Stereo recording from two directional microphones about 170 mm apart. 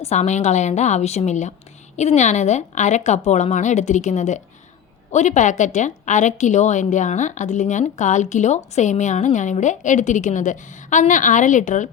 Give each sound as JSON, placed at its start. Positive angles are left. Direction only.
{"t": 0.0, "sound": "a woman's voice", "side_deg": 40}